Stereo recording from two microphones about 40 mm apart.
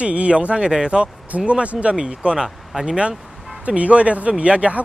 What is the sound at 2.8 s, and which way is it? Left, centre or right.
Speech, right.